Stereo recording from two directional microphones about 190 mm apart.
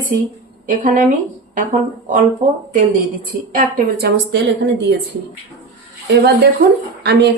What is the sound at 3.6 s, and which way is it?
Speech, 50° right (ahead or behind).